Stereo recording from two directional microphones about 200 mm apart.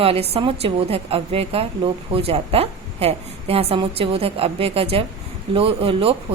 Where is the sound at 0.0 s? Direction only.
30° right (ahead or behind).